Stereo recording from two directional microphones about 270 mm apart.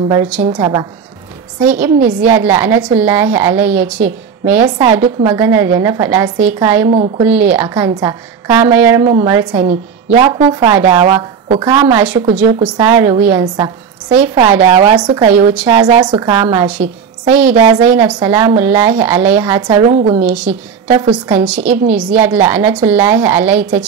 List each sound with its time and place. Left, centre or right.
0.1 s a woman's voice: centre
6.9 s a woman's voice: right
7.2 s a woman's voice: centre; by 20.3 s right
21.3 s a woman's voice: centre